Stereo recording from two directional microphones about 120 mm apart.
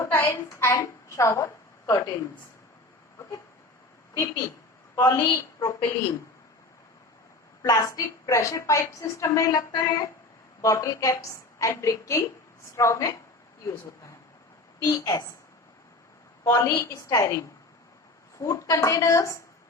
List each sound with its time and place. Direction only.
0.0 s a woman's voice: 20° left (ahead or behind)
4.1 s a woman's voice: 30° left (ahead or behind)
7.6 s a woman's voice: 30° left (ahead or behind)
14.8 s a woman's voice: 35° left (ahead or behind)
16.4 s a woman's voice: 30° left (ahead or behind)